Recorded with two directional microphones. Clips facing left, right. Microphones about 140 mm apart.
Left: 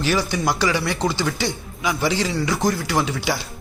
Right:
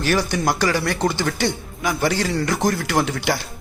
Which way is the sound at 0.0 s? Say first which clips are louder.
Right 1 dB; 50° right (ahead or behind).